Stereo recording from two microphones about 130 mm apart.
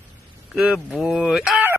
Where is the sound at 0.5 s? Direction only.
Centre (ahead or behind).